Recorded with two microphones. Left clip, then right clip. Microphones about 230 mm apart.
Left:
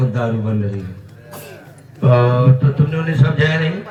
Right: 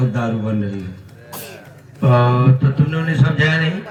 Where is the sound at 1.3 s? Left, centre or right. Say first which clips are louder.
Right 1 dB; right.